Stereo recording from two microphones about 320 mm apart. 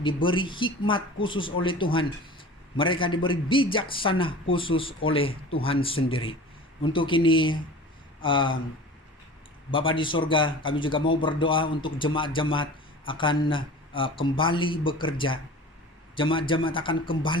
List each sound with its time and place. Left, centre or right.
0.0 s speech: centre
9.7 s speech: centre